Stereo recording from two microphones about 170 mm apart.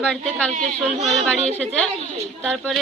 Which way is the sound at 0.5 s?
40° right (ahead or behind).